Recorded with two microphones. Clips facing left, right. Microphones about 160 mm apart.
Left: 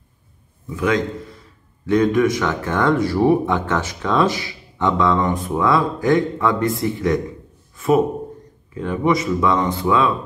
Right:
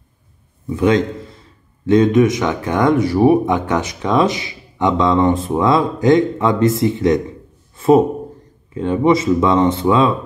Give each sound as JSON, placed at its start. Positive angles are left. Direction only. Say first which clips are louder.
{"t": 0.7, "sound": "a man's voice", "louder": "right 5 dB", "side_deg": -25}
{"t": 7.7, "sound": "a sound", "louder": "right 5 dB", "side_deg": -30}
{"t": 8.7, "sound": "speech", "louder": "right 5 dB", "side_deg": -25}